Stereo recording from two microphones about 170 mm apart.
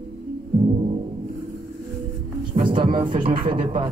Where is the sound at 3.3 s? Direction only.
60° right (ahead or behind).